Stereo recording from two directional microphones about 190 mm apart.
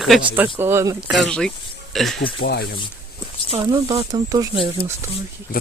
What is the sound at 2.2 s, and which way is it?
Speech, 55° left (ahead or behind).